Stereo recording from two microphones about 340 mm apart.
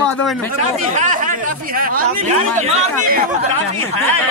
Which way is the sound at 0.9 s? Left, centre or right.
Right.